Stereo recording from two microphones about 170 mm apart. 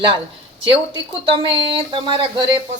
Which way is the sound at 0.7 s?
30° right (ahead or behind).